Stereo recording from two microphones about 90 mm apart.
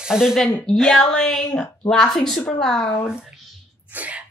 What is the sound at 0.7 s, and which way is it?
Speech, 5° left (ahead or behind).